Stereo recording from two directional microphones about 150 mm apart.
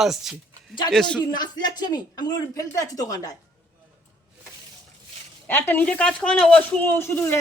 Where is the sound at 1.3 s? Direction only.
25° left (ahead or behind).